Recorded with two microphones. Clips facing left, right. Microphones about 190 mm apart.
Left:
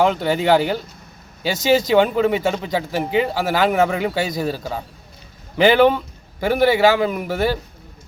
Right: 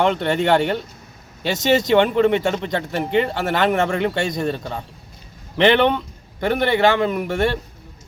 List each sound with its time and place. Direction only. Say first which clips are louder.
0.0 s a man's voice: left 1 dB; 5° left (ahead or behind)